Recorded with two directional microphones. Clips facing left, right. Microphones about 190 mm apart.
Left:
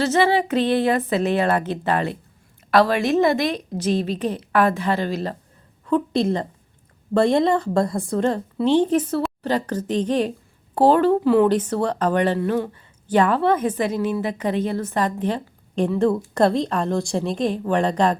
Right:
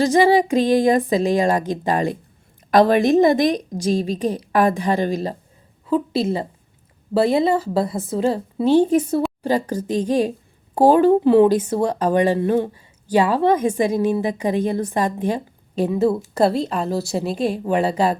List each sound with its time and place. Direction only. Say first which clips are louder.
0.0 s a woman's voice: right 4 dB; 15° right (ahead or behind)
11.4 s a woman's voice: right 2 dB; 10° right (ahead or behind)
12.4 s speech: right 3 dB; 25° right (ahead or behind)
12.7 s a woman's voice: right 1 dB; 10° right (ahead or behind)